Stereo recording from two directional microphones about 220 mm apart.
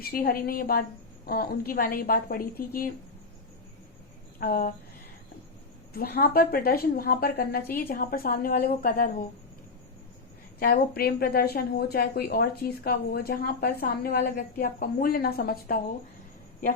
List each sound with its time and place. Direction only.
0.0 s a woman's voice: 45° left (ahead or behind)
4.4 s a sound: 40° left (ahead or behind)
5.9 s a woman's voice: 45° left (ahead or behind)
10.6 s a woman's voice: 45° left (ahead or behind)